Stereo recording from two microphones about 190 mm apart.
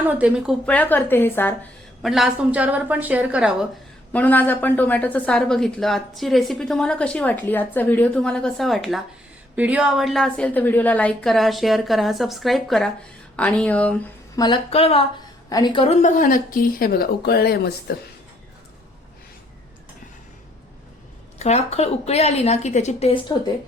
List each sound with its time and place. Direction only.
0.0 s a woman's voice: 5° right (ahead or behind)
0.6 s a woman's voice: 10° left (ahead or behind)
2.0 s a woman's voice: centre (ahead or behind)
4.1 s a woman's voice: 10° left (ahead or behind)
14.3 s a woman's voice: 25° left (ahead or behind)
15.4 s speech: 20° left (ahead or behind); by 17.9 s 55° left (ahead or behind)
21.3 s a woman's voice: 35° left (ahead or behind)